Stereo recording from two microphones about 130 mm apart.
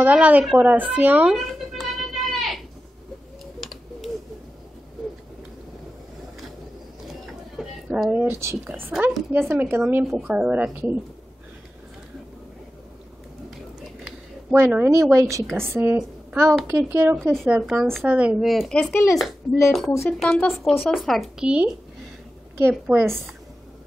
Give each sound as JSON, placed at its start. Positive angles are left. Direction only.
{"t": 0.0, "sound": "speech", "side_deg": -10}
{"t": 1.3, "sound": "a sound", "side_deg": 0}
{"t": 7.1, "sound": "a sound", "side_deg": 0}
{"t": 8.1, "sound": "speech", "side_deg": -15}
{"t": 14.5, "sound": "a woman's voice", "side_deg": -15}
{"t": 19.4, "sound": "speech", "side_deg": 35}
{"t": 19.9, "sound": "speech", "side_deg": 20}
{"t": 20.2, "sound": "speech", "side_deg": 5}
{"t": 20.7, "sound": "speech", "side_deg": 15}
{"t": 21.0, "sound": "speech", "side_deg": 0}